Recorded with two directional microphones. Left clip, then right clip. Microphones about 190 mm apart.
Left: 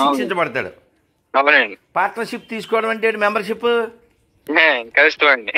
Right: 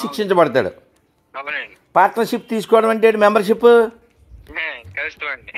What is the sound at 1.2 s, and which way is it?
Speech, 60° left (ahead or behind).